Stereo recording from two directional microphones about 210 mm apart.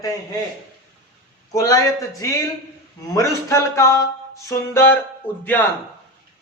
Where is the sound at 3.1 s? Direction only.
15° left (ahead or behind).